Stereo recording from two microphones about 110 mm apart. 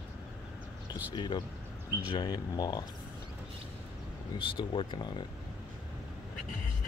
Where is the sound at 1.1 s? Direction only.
45° left (ahead or behind).